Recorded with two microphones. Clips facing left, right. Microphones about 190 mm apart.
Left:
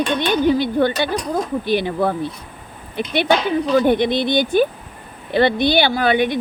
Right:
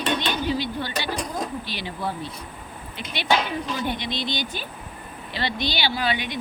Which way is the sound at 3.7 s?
55° left (ahead or behind).